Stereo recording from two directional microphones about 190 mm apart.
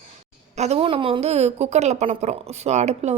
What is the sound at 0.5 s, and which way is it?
A woman's voice, 35° right (ahead or behind).